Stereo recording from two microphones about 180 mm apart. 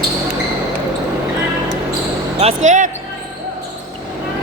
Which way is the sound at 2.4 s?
40° right (ahead or behind).